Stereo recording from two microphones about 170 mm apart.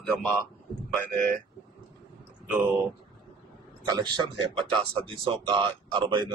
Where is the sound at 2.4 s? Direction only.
10° right (ahead or behind).